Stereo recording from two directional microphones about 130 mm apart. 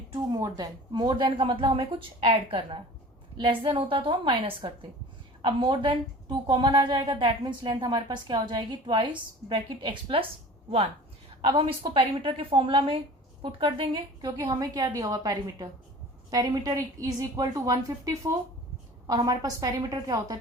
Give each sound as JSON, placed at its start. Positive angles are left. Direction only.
{"t": 0.1, "sound": "a woman's voice", "side_deg": -30}
{"t": 11.4, "sound": "a woman's voice", "side_deg": -35}